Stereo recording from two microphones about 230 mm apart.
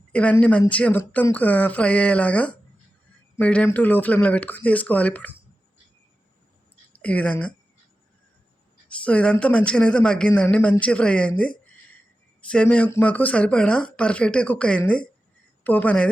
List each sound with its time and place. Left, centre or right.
0.1 s speech: centre
7.0 s speech: centre
8.9 s speech: centre